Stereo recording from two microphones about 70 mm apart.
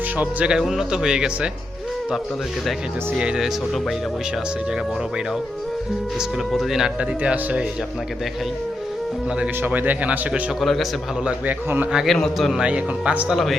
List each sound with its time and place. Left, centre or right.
0.2 s speech: right
0.5 s speech: centre
3.2 s speech: centre
3.7 s speech: centre
4.7 s speech: centre
6.5 s speech: centre
7.0 s speech: centre
9.6 s speech: right
10.6 s speech: centre
11.2 s speech: centre
12.0 s a man's voice: centre
12.4 s speech: centre
12.6 s speech: centre
13.3 s speech: centre